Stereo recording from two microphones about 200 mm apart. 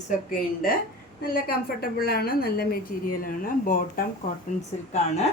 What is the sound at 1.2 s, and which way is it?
A woman's voice, 50° left (ahead or behind).